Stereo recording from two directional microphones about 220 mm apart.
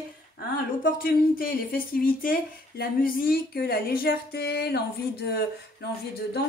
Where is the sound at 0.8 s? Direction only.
40° left (ahead or behind).